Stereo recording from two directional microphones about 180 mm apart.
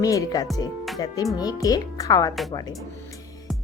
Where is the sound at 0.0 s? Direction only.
20° left (ahead or behind).